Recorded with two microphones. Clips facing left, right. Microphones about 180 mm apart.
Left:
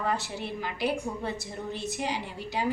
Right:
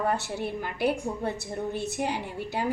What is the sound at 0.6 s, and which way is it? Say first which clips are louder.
A woman's voice: right 1 dB; 55° right (ahead or behind).